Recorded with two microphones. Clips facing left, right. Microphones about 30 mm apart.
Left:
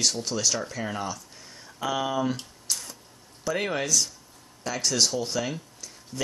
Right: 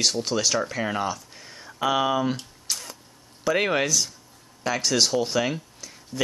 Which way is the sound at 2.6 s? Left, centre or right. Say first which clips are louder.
Right 1 dB; centre.